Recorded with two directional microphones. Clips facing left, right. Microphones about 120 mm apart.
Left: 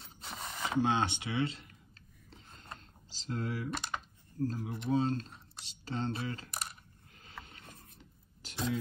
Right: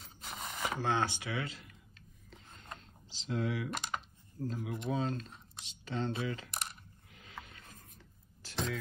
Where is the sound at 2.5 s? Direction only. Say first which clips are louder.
Even; 35° left (ahead or behind).